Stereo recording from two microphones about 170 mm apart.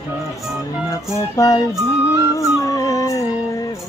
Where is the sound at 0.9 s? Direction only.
20° left (ahead or behind).